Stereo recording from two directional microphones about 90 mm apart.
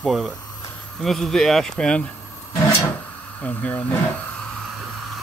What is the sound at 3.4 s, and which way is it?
Speech, 15° left (ahead or behind).